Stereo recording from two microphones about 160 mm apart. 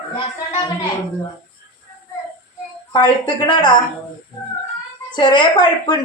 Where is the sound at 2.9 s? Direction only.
30° left (ahead or behind).